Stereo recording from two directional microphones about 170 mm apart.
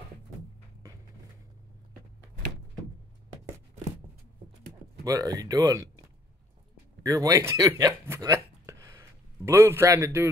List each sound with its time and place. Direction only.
5.0 s speech: 20° right (ahead or behind)
7.1 s speech: 20° right (ahead or behind)